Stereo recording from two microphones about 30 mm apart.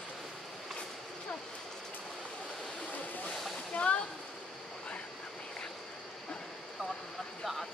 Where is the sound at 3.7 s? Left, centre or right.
Left.